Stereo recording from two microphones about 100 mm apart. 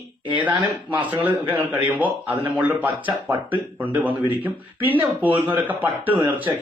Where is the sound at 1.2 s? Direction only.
15° right (ahead or behind).